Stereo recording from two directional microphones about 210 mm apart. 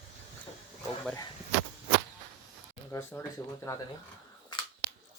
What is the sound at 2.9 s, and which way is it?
Speech, 10° left (ahead or behind).